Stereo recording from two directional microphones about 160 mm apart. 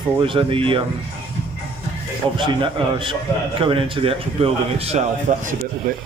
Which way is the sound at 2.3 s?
30° right (ahead or behind).